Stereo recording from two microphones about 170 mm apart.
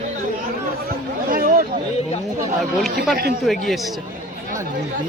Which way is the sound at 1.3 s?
55° right (ahead or behind).